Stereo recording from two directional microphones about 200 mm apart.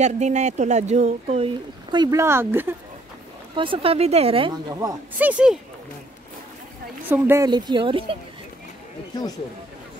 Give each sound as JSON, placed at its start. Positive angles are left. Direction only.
{"t": 0.0, "sound": "speech", "side_deg": -35}
{"t": 1.9, "sound": "speech", "side_deg": -20}
{"t": 3.5, "sound": "speech", "side_deg": -25}
{"t": 7.1, "sound": "speech", "side_deg": -15}